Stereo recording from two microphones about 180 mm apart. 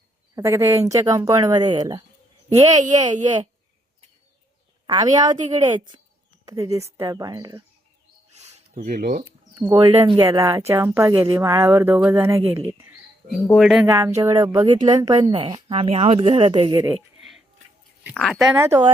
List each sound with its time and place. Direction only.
0.3 s speech: 15° right (ahead or behind)
2.7 s speech: 40° right (ahead or behind)
4.9 s speech: 20° right (ahead or behind)
8.4 s a sound: 35° right (ahead or behind)
8.9 s speech: 50° right (ahead or behind)
9.2 s speech: 20° right (ahead or behind)
9.9 s speech: 35° right (ahead or behind)
10.2 s speech: 20° right (ahead or behind)
13.3 s speech: centre (ahead or behind)
14.2 s speech: 20° right (ahead or behind)
17.2 s a sound: centre (ahead or behind)
18.0 s speech: centre (ahead or behind)
18.5 s speech: 15° right (ahead or behind)